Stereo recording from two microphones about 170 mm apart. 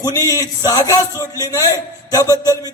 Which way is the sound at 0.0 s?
20° left (ahead or behind).